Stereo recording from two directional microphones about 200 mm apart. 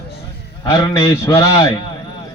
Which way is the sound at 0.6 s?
15° left (ahead or behind).